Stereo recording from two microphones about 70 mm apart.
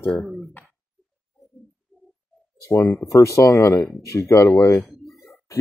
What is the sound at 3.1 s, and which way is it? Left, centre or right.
Speech, left.